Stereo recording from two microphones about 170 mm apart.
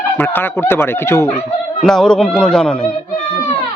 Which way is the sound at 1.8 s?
5° left (ahead or behind).